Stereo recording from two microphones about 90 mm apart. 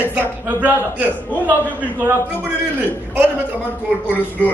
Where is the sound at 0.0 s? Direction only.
20° right (ahead or behind).